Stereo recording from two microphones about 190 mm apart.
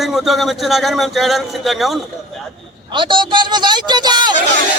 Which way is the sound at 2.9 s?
25° right (ahead or behind).